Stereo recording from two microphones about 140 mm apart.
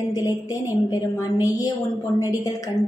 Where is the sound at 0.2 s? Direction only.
25° left (ahead or behind).